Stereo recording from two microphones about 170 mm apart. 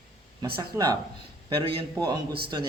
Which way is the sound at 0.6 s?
20° right (ahead or behind).